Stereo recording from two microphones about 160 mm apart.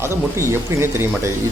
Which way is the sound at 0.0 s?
15° right (ahead or behind).